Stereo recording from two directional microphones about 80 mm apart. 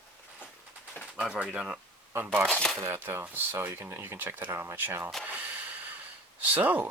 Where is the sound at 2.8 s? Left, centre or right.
Right.